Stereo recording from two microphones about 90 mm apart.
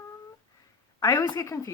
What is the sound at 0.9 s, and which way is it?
Speech, 40° left (ahead or behind).